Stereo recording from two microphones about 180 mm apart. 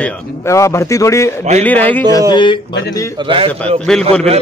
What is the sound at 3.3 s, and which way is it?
Speech, 30° right (ahead or behind).